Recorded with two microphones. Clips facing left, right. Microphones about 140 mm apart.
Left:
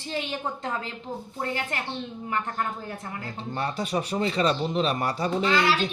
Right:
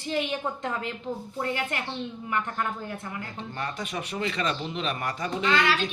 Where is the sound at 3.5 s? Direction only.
35° left (ahead or behind).